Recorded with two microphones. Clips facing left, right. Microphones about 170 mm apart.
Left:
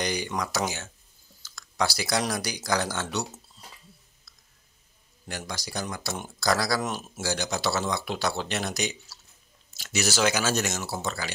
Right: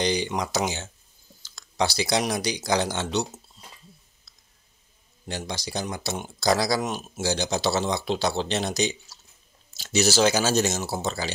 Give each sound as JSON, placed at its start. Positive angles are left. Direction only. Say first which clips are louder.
{"t": 0.0, "sound": "speech", "louder": "right 4 dB", "side_deg": -25}
{"t": 5.3, "sound": "speech", "louder": "right 4 dB", "side_deg": -25}